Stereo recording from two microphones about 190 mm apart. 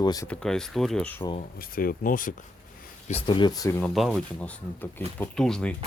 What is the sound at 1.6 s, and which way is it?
Speech, 50° left (ahead or behind).